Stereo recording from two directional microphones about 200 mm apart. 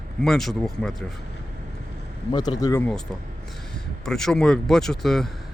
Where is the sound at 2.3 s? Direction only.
20° left (ahead or behind).